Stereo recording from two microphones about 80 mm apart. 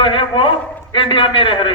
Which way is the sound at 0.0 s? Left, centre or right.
Left.